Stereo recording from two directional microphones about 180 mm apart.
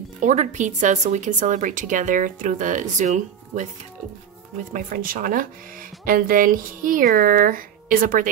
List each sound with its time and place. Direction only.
0.2 s speech: 40° right (ahead or behind)
4.7 s speech: 50° right (ahead or behind)